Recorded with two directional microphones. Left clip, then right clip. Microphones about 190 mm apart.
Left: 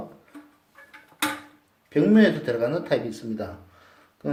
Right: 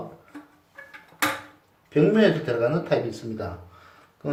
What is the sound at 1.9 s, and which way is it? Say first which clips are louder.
Speech: right 1 dB; 35° left (ahead or behind).